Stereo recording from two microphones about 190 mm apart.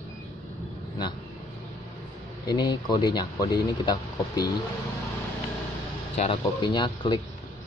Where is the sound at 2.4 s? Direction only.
20° left (ahead or behind).